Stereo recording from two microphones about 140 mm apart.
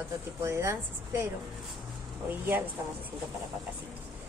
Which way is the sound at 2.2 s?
15° right (ahead or behind).